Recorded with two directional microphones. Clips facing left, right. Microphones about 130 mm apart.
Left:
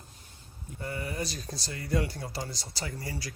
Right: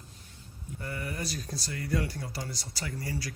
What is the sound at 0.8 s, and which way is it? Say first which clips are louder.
Speech: left 2 dB; 25° left (ahead or behind).